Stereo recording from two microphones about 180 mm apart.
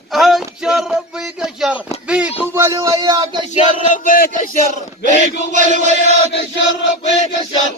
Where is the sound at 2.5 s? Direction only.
15° right (ahead or behind).